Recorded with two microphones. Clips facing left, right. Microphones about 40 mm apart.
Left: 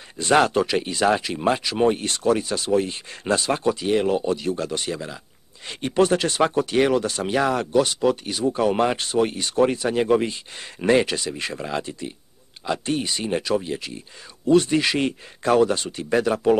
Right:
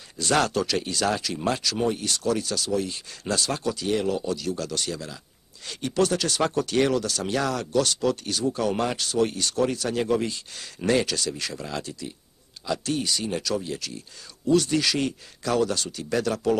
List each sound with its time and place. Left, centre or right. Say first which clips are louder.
0.2 s speech: left 5 dB; left